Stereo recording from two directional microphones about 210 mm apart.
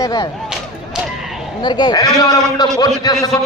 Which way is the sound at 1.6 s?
20° left (ahead or behind).